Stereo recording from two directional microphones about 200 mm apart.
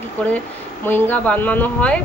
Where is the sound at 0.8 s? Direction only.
10° left (ahead or behind).